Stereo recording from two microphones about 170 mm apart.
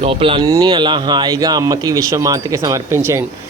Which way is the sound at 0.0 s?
35° right (ahead or behind).